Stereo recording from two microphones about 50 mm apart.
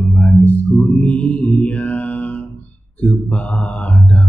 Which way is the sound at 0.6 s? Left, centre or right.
Centre.